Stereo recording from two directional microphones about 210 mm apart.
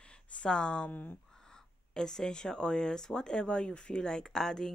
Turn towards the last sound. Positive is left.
turn(degrees=0)  # may be behind; listen again after turning